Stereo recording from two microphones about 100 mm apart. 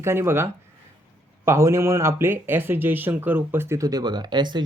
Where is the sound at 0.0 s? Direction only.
25° right (ahead or behind).